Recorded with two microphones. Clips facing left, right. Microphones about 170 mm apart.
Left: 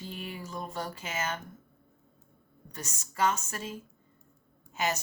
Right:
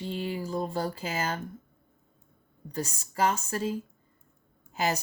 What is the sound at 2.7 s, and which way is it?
Speech, 30° right (ahead or behind).